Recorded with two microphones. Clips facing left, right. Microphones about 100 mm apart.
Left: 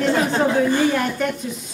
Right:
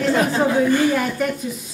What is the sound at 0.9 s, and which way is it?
Speech, centre (ahead or behind).